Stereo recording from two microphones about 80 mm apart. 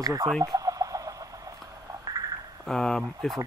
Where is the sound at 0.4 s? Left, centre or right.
Right.